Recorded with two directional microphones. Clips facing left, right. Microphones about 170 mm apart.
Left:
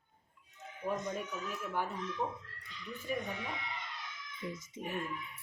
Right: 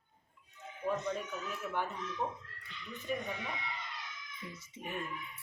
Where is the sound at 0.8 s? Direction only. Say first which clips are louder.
Right 1 dB; 10° left (ahead or behind).